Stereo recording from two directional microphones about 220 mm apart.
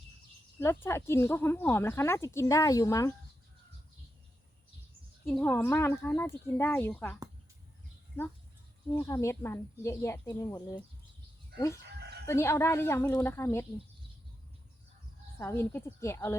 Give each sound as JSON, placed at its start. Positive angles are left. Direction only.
{"t": 0.6, "sound": "speech", "side_deg": 10}
{"t": 5.2, "sound": "speech", "side_deg": 5}
{"t": 8.9, "sound": "speech", "side_deg": 15}
{"t": 11.9, "sound": "chicken", "side_deg": -50}
{"t": 12.2, "sound": "speech", "side_deg": 10}
{"t": 15.4, "sound": "speech", "side_deg": 10}